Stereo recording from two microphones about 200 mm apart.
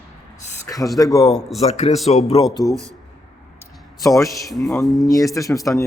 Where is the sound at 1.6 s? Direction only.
35° left (ahead or behind).